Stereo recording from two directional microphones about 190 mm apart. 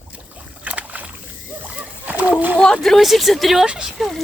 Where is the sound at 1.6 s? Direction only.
10° right (ahead or behind).